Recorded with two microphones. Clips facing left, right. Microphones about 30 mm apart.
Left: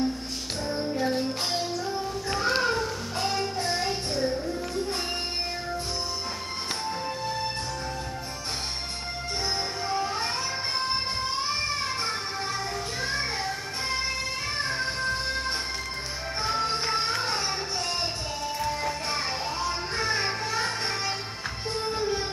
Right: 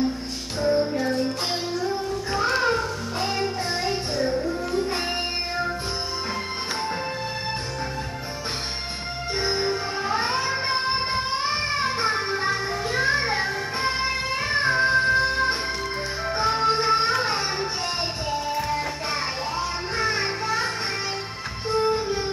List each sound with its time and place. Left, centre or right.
0.6 s music: centre
2.3 s music: centre
9.4 s music: right